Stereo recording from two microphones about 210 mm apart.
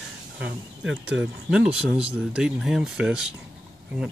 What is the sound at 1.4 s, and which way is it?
Speech, 5° right (ahead or behind).